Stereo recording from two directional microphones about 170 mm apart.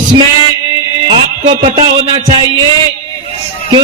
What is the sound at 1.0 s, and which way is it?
Music, 30° right (ahead or behind).